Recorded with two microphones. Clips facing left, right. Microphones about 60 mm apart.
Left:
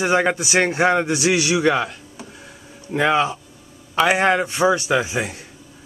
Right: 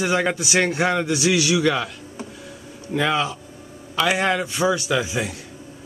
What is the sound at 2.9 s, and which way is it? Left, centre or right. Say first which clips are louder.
A man's voice: left 3 dB; left.